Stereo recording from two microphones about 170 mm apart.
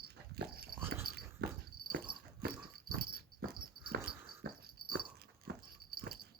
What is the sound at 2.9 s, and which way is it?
Dog, 65° right (ahead or behind).